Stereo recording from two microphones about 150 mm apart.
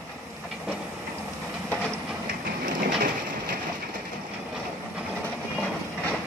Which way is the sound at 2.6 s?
70° right (ahead or behind).